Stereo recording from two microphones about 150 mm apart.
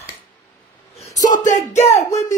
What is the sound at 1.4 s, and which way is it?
Speech, 55° left (ahead or behind).